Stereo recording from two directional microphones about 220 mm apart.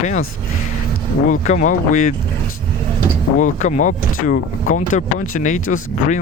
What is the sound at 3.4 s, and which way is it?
Speech, 35° left (ahead or behind).